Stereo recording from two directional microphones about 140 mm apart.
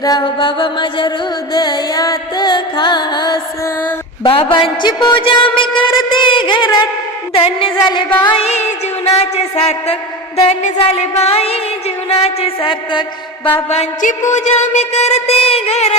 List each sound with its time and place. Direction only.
0.0 s mantra: 30° left (ahead or behind)
1.5 s music: 30° left (ahead or behind)
4.2 s a woman's voice: 40° left (ahead or behind)
7.3 s mantra: 40° left (ahead or behind)
8.2 s a sound: 40° left (ahead or behind)
14.3 s a sound: 55° left (ahead or behind)